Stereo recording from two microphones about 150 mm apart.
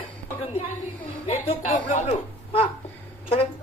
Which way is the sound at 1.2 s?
40° left (ahead or behind).